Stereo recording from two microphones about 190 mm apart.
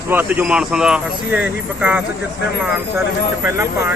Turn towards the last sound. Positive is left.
turn(degrees=-15)  # may be behind; listen again after turning